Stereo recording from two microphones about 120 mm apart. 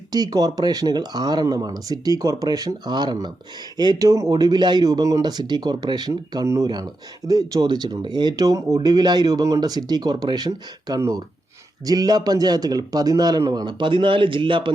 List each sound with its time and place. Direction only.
0.1 s speech: 35° right (ahead or behind)